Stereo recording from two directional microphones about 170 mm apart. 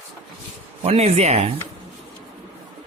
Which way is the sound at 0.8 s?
40° right (ahead or behind).